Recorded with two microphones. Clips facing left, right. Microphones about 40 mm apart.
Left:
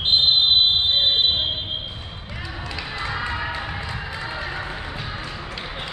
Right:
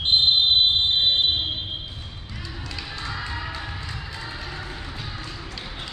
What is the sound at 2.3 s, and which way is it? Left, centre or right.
Music, left.